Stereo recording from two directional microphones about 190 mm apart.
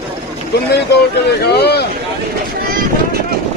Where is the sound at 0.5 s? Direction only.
60° left (ahead or behind).